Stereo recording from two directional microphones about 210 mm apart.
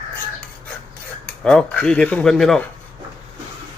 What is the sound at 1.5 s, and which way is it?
Speech, 5° left (ahead or behind).